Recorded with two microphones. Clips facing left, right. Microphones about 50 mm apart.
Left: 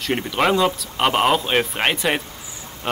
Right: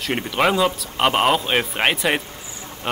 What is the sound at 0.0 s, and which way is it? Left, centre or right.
Speech, centre.